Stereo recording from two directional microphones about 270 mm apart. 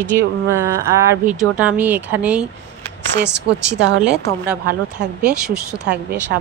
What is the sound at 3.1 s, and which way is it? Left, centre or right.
Speech, right.